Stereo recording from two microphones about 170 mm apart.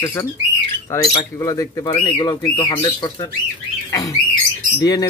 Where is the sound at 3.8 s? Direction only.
20° left (ahead or behind).